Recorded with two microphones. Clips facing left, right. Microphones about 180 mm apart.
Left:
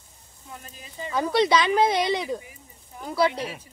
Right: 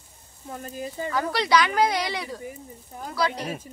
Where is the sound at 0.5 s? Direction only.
45° right (ahead or behind).